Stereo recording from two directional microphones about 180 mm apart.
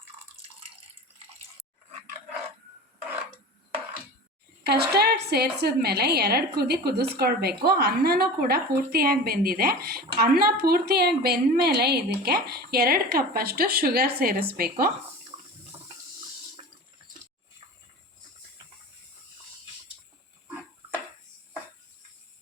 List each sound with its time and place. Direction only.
4.6 s a woman's voice: 65° right (ahead or behind)